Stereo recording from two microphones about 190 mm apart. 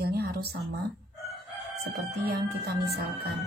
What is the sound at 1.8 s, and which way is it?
A woman's voice, 55° right (ahead or behind).